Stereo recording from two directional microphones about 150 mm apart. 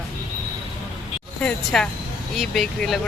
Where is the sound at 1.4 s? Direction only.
5° left (ahead or behind).